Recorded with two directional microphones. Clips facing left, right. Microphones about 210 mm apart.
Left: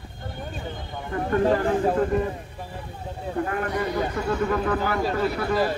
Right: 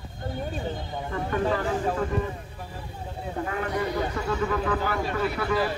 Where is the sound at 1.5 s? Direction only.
40° left (ahead or behind).